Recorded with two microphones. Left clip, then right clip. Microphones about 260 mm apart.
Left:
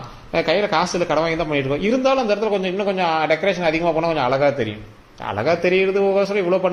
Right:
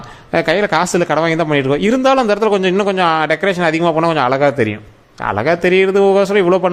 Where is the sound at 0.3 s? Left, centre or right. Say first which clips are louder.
Right 4 dB; right.